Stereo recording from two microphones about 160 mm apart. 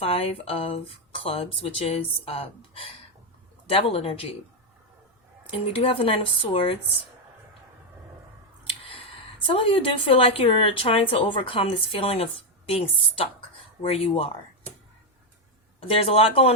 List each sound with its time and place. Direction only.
0.0 s a woman's voice: 40° left (ahead or behind)
5.7 s a woman's voice: 35° left (ahead or behind)
8.6 s a sound: 35° left (ahead or behind)
9.5 s a woman's voice: 35° left (ahead or behind)
15.9 s a woman's voice: 35° left (ahead or behind)